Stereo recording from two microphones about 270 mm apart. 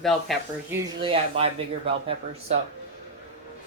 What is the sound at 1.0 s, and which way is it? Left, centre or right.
Speech, right.